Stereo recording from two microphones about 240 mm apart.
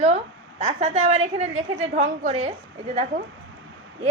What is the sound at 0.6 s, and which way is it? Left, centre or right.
A woman's voice, right.